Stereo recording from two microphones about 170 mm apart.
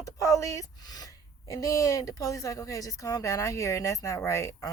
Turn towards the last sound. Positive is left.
turn(degrees=15)  # may be behind; listen again after turning